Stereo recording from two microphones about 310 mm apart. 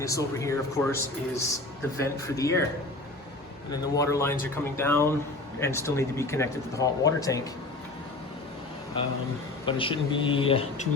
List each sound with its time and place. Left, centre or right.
0.0 s speech: centre
3.7 s speech: centre
9.6 s speech: centre